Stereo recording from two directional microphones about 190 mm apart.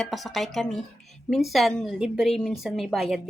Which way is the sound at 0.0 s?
Centre (ahead or behind).